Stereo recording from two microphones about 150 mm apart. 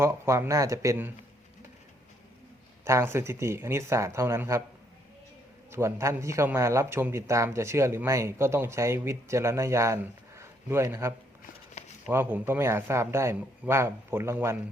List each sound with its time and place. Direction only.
0.0 s a man's voice: 20° right (ahead or behind)
2.8 s a man's voice: 15° right (ahead or behind)
5.7 s a man's voice: 20° right (ahead or behind)
11.8 s a sound: 45° left (ahead or behind)
12.1 s a man's voice: 15° right (ahead or behind)